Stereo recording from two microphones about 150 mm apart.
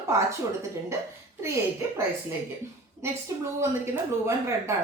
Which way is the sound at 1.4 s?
20° right (ahead or behind).